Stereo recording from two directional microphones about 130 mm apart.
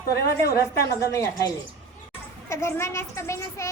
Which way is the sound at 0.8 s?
25° left (ahead or behind).